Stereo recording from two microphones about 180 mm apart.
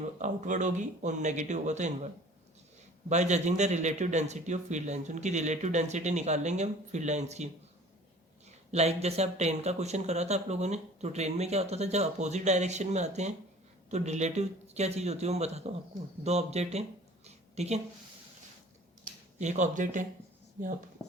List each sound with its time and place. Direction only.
0.0 s speech: 45° right (ahead or behind)
3.1 s speech: 40° right (ahead or behind)
17.2 s a sound: 35° right (ahead or behind)
19.4 s speech: 40° right (ahead or behind)